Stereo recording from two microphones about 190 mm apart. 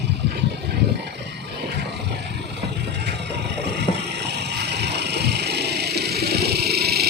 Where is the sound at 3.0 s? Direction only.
60° right (ahead or behind).